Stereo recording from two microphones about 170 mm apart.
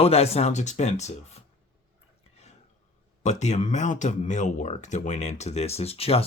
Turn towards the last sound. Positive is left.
turn(degrees=35)  # may be behind; listen again after turning